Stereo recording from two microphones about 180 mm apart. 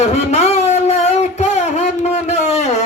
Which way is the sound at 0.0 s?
35° left (ahead or behind).